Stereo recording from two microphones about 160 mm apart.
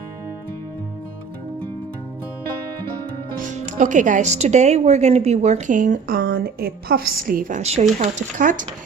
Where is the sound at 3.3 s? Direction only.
50° right (ahead or behind).